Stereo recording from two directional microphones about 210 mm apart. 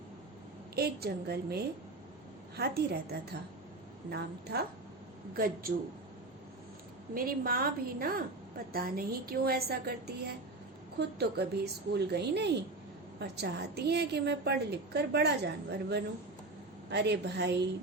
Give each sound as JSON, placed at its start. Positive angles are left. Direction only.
{"t": 0.8, "sound": "a woman's voice", "side_deg": -50}
{"t": 7.1, "sound": "a woman's voice", "side_deg": -45}